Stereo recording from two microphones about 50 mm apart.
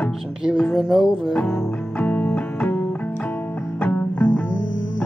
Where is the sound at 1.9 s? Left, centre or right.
Left.